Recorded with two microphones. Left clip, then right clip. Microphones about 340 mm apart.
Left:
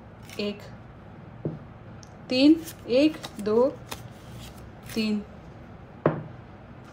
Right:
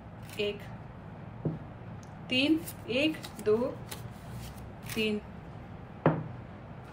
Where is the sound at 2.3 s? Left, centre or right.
Centre.